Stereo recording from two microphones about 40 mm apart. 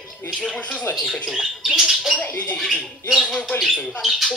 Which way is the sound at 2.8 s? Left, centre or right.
Centre.